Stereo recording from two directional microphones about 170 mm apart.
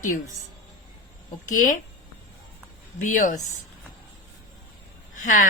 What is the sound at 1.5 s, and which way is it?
Speech, 50° left (ahead or behind).